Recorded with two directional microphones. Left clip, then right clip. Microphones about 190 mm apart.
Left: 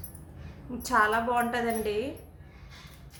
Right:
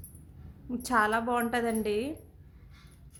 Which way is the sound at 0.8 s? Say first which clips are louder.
Left 2 dB; 60° right (ahead or behind).